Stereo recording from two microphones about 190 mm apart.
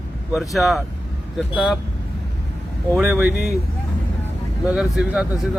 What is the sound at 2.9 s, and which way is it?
Speech, 10° right (ahead or behind).